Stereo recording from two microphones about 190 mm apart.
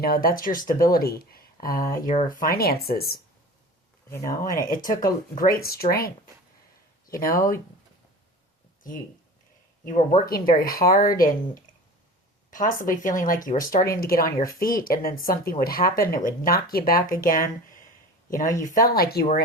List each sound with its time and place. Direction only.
0.0 s speech: 50° left (ahead or behind)
4.3 s speech: 45° left (ahead or behind)
7.1 s speech: 45° left (ahead or behind)
9.8 s speech: 40° left (ahead or behind)